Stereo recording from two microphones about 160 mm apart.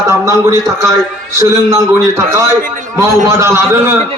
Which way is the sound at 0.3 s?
20° right (ahead or behind).